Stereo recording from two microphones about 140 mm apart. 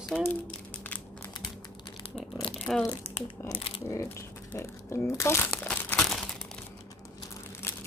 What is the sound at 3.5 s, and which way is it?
Crumpling, 40° left (ahead or behind).